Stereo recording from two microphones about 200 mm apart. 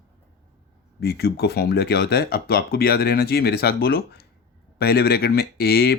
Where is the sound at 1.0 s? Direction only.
55° left (ahead or behind).